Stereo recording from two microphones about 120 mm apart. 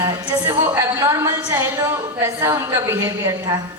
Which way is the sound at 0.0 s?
30° right (ahead or behind).